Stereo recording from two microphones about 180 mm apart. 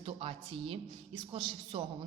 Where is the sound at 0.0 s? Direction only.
30° right (ahead or behind).